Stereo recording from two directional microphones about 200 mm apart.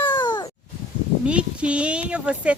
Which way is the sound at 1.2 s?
5° right (ahead or behind).